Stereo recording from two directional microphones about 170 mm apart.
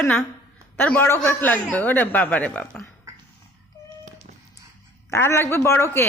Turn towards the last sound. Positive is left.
turn(degrees=15)  # may be behind; listen again after turning